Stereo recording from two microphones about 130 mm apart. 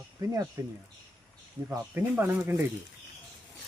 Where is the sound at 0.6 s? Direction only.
25° right (ahead or behind).